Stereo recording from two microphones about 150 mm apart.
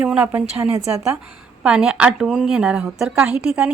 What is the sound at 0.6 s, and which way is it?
Speech, 20° right (ahead or behind).